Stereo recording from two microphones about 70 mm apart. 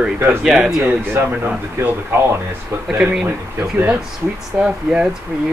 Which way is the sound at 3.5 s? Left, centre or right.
Right.